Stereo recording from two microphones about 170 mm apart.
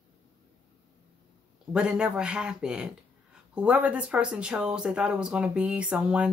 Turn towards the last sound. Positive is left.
turn(degrees=-5)  # may be behind; listen again after turning